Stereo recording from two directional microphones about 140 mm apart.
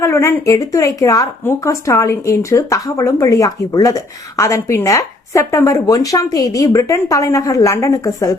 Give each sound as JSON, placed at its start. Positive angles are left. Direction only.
{"t": 0.0, "sound": "speech", "side_deg": 20}